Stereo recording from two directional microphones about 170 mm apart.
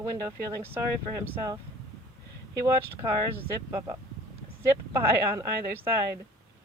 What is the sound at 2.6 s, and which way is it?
Speech, 15° right (ahead or behind).